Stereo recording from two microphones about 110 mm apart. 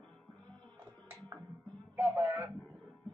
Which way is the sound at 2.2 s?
20° right (ahead or behind).